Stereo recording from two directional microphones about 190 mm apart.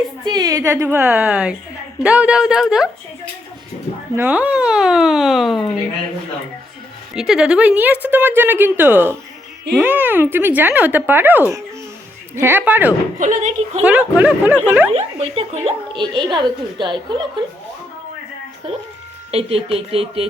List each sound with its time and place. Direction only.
0.3 s a woman's voice: 20° right (ahead or behind); by 2.9 s 5° right (ahead or behind)
4.1 s speech: 10° right (ahead or behind)
7.2 s a woman's voice: centre (ahead or behind)
13.1 s speech: 40° right (ahead or behind)
13.8 s a woman's voice: 5° right (ahead or behind)
14.9 s speech: 35° right (ahead or behind)
19.3 s speech: 30° right (ahead or behind)